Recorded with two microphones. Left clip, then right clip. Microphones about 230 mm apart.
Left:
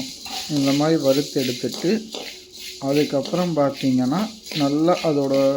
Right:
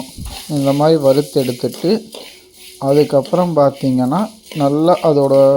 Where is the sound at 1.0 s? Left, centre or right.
Centre.